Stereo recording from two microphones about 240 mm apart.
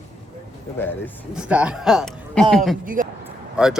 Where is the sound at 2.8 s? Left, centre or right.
Right.